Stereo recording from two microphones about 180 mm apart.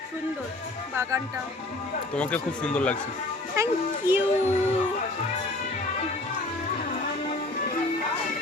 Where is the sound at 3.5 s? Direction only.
15° right (ahead or behind).